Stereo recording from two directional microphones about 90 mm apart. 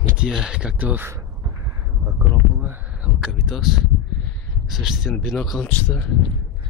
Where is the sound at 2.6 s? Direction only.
25° right (ahead or behind).